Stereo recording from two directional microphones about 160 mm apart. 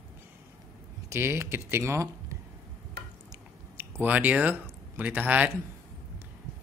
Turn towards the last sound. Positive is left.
turn(degrees=-10)  # may be behind; listen again after turning